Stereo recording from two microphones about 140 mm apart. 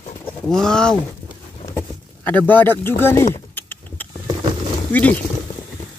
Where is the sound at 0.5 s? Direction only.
5° left (ahead or behind).